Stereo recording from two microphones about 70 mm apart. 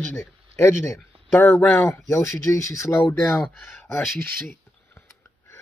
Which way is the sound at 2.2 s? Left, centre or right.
Left.